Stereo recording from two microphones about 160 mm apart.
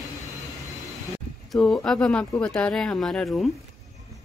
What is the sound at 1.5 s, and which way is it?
Speech, 5° left (ahead or behind).